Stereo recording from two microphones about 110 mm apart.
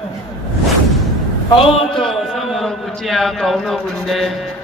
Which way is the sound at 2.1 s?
Centre (ahead or behind).